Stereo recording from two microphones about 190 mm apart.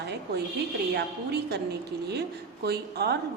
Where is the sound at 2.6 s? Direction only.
60° right (ahead or behind).